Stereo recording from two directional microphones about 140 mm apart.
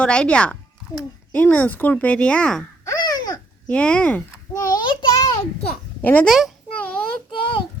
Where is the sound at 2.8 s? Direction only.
25° left (ahead or behind).